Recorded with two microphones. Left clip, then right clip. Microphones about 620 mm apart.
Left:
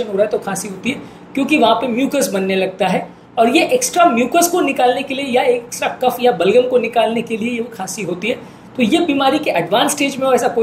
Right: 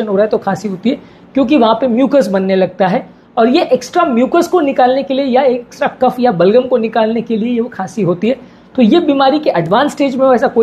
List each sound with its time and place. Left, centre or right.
0.3 s a woman's voice: right